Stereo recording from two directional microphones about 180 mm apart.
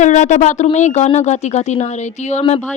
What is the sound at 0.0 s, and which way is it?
Speech, 40° left (ahead or behind).